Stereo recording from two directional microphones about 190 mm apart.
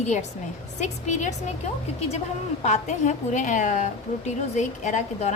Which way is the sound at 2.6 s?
35° left (ahead or behind).